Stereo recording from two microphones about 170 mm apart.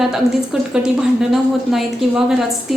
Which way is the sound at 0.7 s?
5° right (ahead or behind).